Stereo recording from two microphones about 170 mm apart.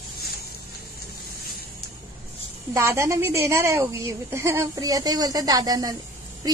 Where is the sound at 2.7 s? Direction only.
15° right (ahead or behind).